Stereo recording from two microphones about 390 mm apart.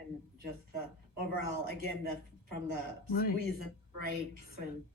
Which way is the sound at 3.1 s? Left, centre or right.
Left.